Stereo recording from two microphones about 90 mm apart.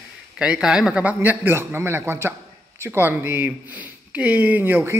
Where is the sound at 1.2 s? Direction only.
20° right (ahead or behind).